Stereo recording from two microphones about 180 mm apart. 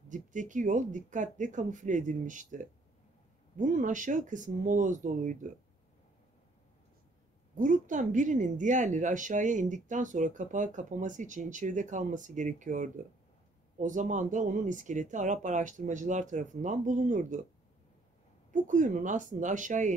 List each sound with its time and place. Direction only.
0.1 s a woman's voice: 45° right (ahead or behind)
7.5 s a woman's voice: 45° right (ahead or behind)
18.5 s a woman's voice: 45° right (ahead or behind)